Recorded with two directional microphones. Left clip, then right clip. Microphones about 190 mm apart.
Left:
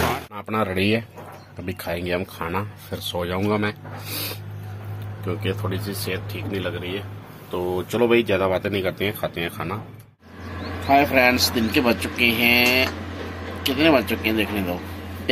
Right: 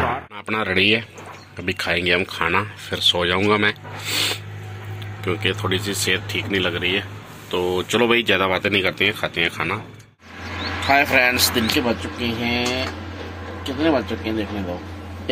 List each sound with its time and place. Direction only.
0.4 s speech: centre (ahead or behind)
7.5 s speech: 10° left (ahead or behind)
10.9 s speech: centre (ahead or behind)
12.2 s speech: 15° left (ahead or behind)